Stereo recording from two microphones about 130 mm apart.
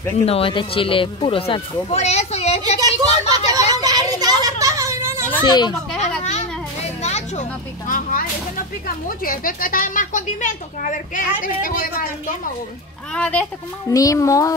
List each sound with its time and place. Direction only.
0.2 s speech: 45° left (ahead or behind)
2.8 s a sound: 30° right (ahead or behind)
5.4 s a child's voice: 35° left (ahead or behind)
5.9 s children playing: 60° left (ahead or behind)
7.0 s a sound: 60° left (ahead or behind)
7.9 s speech: 90° left
13.1 s a child's voice: 10° left (ahead or behind)
13.8 s a child's voice: 25° left (ahead or behind)